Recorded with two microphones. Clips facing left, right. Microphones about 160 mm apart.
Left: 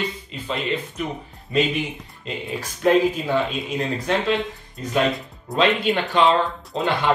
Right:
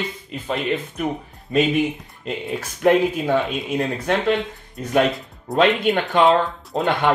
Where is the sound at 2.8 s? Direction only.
60° right (ahead or behind).